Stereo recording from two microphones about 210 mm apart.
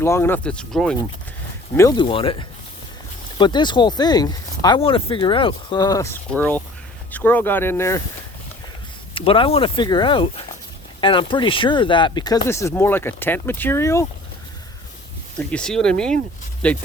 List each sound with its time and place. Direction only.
0.0 s speech: 10° left (ahead or behind)
1.7 s speech: 15° left (ahead or behind)
9.1 s speech: 25° left (ahead or behind)
15.4 s speech: 5° left (ahead or behind)